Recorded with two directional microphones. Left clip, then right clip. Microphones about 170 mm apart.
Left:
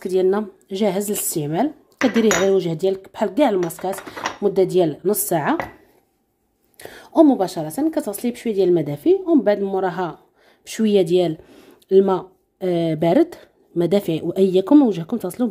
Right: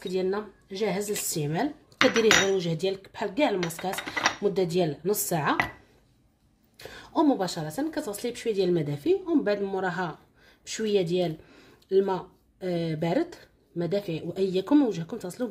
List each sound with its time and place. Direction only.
0.0 s speech: 40° left (ahead or behind)
6.8 s speech: 40° left (ahead or behind)